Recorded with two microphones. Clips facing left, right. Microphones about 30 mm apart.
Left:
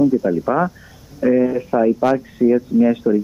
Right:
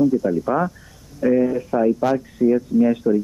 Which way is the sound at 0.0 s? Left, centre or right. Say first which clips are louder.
Left 2 dB; centre.